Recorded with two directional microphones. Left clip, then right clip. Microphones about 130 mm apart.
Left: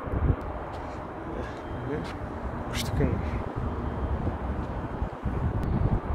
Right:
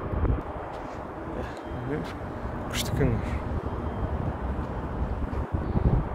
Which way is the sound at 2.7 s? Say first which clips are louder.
Right 2 dB; 40° right (ahead or behind).